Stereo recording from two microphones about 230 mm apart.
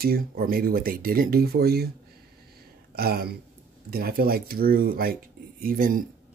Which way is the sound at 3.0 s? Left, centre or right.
Right.